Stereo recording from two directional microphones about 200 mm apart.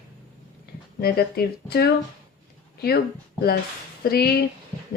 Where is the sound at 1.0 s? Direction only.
50° left (ahead or behind).